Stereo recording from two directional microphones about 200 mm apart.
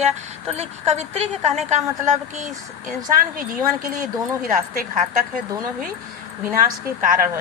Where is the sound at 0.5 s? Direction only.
35° right (ahead or behind).